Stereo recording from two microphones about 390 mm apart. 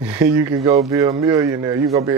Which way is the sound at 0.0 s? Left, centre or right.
Centre.